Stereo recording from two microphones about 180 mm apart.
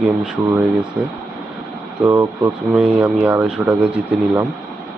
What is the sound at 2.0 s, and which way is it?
Speech, 20° right (ahead or behind).